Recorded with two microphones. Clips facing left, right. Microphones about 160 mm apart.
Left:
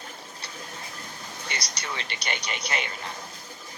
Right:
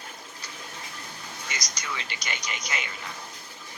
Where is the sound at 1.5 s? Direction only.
65° left (ahead or behind).